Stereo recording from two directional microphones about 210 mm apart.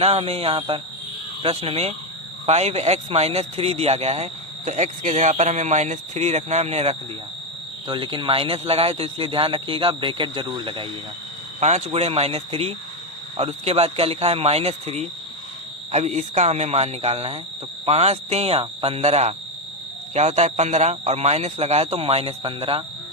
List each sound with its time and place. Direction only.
0.0 s speech: 30° right (ahead or behind)